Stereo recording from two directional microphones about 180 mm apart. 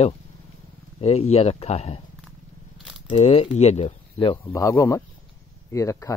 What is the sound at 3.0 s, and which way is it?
Speech, 35° left (ahead or behind).